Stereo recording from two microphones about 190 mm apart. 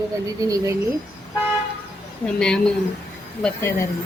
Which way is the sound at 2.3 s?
5° left (ahead or behind).